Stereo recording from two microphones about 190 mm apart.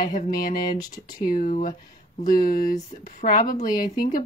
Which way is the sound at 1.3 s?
45° left (ahead or behind).